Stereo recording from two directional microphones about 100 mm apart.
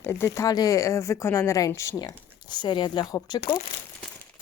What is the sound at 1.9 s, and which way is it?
Speech, 45° left (ahead or behind).